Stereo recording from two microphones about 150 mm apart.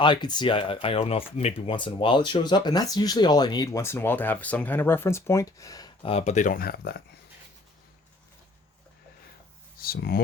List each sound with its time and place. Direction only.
0.0 s speech: 30° left (ahead or behind)
6.1 s speech: 45° left (ahead or behind); by 6.9 s 85° left
9.7 s speech: 80° left